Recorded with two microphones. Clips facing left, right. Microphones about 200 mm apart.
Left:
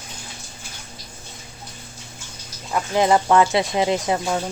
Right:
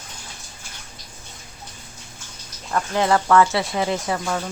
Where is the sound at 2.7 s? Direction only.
15° left (ahead or behind).